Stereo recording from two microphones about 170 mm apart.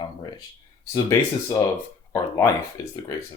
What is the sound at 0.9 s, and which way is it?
Speech, 20° left (ahead or behind).